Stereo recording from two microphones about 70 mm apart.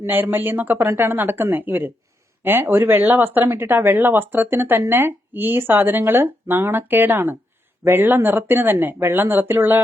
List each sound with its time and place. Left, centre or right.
0.1 s speech: right